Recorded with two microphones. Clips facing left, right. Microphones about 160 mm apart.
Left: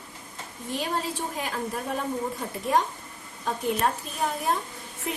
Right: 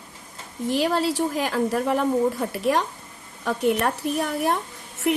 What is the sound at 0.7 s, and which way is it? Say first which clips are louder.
A woman's voice: right 8 dB; 90° right.